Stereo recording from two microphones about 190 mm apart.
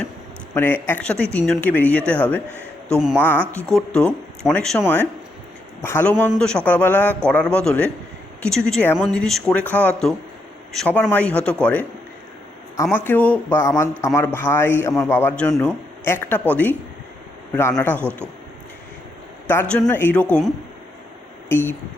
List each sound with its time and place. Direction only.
0.5 s a man's voice: 10° left (ahead or behind)
2.9 s speech: 5° right (ahead or behind)
3.7 s a man's voice: 5° left (ahead or behind)
18.0 s speech: 10° right (ahead or behind)
19.5 s a man's voice: 10° left (ahead or behind)
21.5 s a man's voice: 10° left (ahead or behind)